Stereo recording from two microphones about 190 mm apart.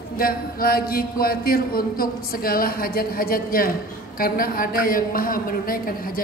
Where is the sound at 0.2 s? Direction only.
50° left (ahead or behind).